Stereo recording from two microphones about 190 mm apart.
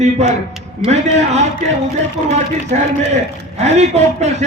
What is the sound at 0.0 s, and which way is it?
A man's voice, 35° right (ahead or behind).